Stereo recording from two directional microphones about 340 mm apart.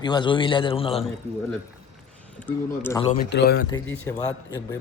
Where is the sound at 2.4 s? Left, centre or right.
Centre.